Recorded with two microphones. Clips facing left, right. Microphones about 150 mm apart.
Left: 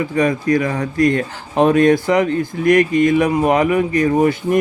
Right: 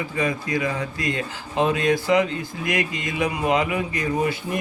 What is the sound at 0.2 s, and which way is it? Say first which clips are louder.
Speech: left 8 dB; 50° left (ahead or behind).